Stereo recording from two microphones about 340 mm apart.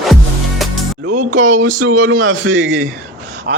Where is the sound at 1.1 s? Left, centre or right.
Right.